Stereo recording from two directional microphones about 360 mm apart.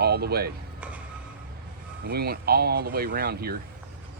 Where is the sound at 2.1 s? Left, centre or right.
Right.